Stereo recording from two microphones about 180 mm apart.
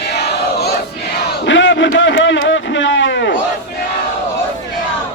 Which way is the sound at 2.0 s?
90° left.